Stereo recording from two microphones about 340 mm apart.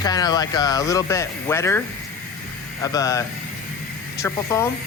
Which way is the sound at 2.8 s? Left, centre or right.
Centre.